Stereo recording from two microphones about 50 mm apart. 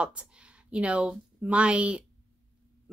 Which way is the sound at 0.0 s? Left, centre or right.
Right.